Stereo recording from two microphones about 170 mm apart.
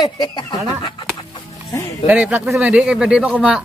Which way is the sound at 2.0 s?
10° right (ahead or behind).